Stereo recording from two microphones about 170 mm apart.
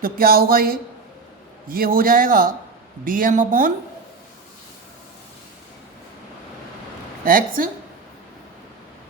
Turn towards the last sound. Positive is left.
turn(degrees=-55)  # may be behind; listen again after turning